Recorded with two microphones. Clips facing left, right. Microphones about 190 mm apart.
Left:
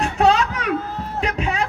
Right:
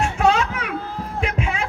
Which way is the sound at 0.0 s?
35° left (ahead or behind).